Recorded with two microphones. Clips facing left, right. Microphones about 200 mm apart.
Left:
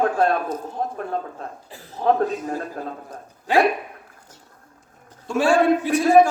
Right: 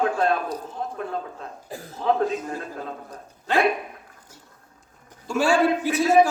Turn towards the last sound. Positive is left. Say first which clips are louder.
# left 3 dB
turn(degrees=0)  # may be behind; listen again after turning